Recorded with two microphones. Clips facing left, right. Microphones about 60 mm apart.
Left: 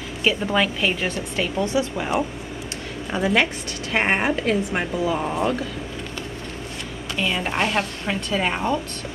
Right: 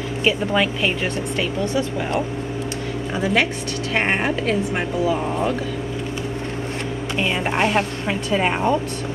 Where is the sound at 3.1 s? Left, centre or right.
Centre.